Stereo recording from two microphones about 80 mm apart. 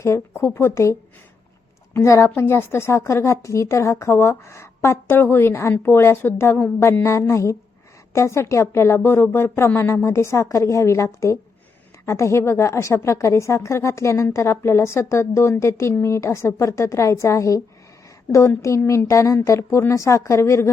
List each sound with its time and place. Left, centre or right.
0.0 s a woman's voice: left